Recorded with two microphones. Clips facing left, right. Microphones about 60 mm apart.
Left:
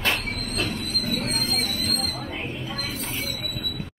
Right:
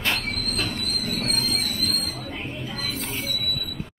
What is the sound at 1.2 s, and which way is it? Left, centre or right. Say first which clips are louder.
Music: even; left.